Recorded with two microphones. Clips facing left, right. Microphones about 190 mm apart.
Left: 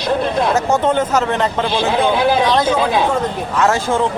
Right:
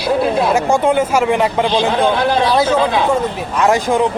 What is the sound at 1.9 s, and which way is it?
Speech, 10° left (ahead or behind).